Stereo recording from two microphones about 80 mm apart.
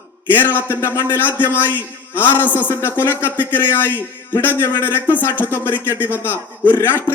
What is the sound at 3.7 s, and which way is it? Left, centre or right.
A man's voice, left.